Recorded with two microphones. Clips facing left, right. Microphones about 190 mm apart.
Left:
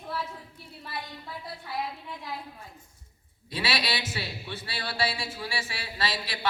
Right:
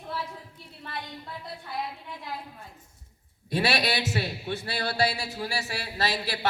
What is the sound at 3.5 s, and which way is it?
A man's voice, 45° right (ahead or behind).